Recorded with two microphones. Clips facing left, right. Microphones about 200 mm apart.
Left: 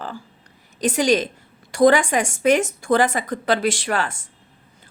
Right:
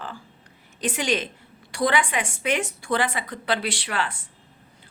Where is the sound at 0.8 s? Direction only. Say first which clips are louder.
Left 7 dB; 40° left (ahead or behind).